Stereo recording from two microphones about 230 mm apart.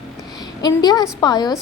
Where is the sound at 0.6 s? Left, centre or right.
Centre.